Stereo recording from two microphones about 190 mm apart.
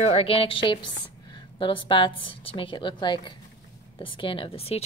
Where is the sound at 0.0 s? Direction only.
30° left (ahead or behind).